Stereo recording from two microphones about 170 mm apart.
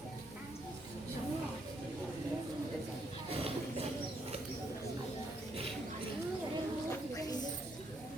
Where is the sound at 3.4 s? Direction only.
35° right (ahead or behind).